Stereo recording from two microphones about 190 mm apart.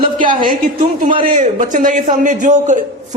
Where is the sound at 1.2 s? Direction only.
45° right (ahead or behind).